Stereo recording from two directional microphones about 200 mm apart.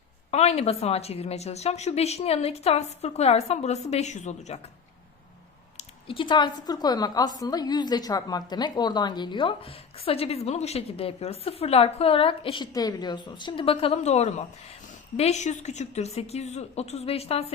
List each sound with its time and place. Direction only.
0.3 s a woman's voice: 30° left (ahead or behind)
6.1 s a woman's voice: 25° left (ahead or behind)